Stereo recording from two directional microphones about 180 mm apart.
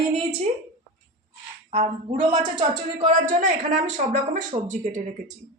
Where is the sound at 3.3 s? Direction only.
45° right (ahead or behind).